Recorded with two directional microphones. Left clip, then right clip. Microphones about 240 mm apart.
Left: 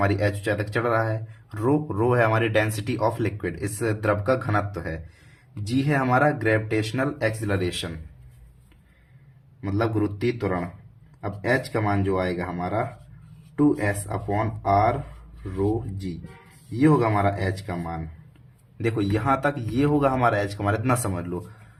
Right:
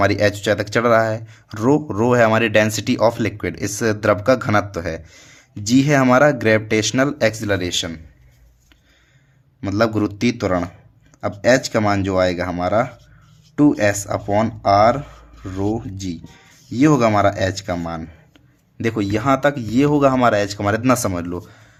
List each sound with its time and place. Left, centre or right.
0.0 s speech: right
9.6 s speech: right